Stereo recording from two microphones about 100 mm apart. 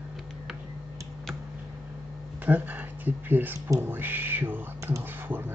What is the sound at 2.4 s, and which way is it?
Speech, 15° right (ahead or behind).